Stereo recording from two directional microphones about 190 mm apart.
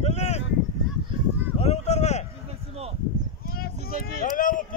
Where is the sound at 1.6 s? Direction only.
35° left (ahead or behind).